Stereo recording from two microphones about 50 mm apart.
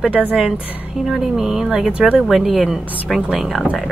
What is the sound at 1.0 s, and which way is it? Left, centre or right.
Speech, centre.